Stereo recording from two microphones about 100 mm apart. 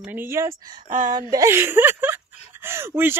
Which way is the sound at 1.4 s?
25° right (ahead or behind).